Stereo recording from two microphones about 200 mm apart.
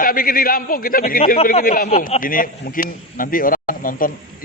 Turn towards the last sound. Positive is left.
turn(degrees=45)  # may be behind; listen again after turning